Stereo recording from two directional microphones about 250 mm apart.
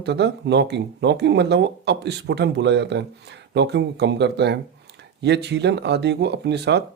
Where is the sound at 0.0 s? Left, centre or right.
Right.